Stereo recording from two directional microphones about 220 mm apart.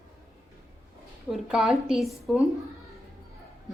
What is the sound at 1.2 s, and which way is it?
A woman's voice, centre (ahead or behind).